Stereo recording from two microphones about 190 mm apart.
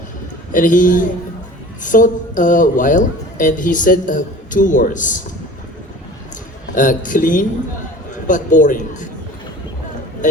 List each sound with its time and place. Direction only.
0.5 s a man's voice: 45° left (ahead or behind)
6.7 s a man's voice: 45° left (ahead or behind)